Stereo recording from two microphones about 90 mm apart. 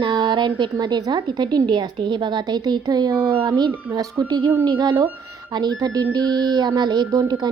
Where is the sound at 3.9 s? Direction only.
45° right (ahead or behind).